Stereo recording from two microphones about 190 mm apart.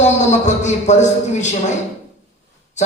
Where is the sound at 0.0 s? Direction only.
40° left (ahead or behind).